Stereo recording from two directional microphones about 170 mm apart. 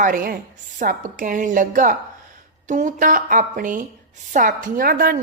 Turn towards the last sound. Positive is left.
turn(degrees=-60)  # may be behind; listen again after turning